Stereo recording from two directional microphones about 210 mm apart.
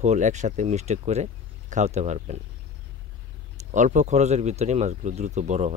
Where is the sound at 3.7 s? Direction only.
35° right (ahead or behind).